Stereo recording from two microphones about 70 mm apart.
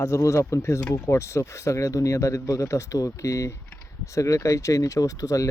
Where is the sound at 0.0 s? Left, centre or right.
Left.